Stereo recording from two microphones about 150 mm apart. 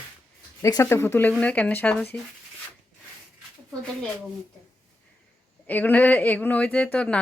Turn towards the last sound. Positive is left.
turn(degrees=5)  # may be behind; listen again after turning